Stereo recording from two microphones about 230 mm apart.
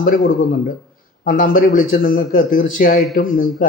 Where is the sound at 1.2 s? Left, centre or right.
Left.